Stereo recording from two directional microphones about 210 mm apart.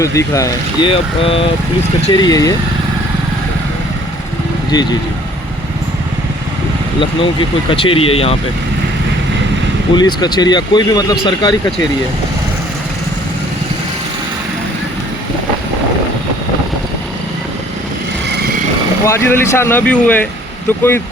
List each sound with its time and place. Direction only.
0.0 s speech: 15° left (ahead or behind)
7.7 s speech: 25° left (ahead or behind)
9.9 s speech: 20° left (ahead or behind)
19.0 s speech: 10° left (ahead or behind)